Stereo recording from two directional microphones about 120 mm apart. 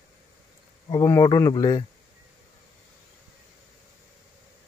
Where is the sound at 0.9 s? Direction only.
30° left (ahead or behind).